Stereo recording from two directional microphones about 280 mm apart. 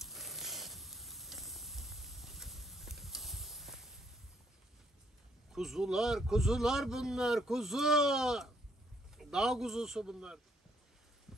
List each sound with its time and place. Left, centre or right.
0.0 s sizzle: centre
5.5 s a man's voice: centre